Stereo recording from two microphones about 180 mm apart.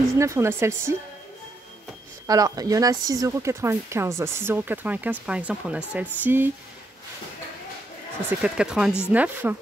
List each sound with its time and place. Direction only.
0.2 s speech: 15° right (ahead or behind)
2.2 s speech: 20° right (ahead or behind)
8.4 s speech: 5° right (ahead or behind)